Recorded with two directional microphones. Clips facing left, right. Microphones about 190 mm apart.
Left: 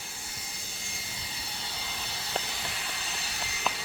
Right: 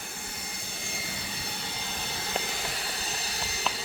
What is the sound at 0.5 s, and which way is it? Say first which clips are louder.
Jet engine: right 5 dB; 60° right (ahead or behind).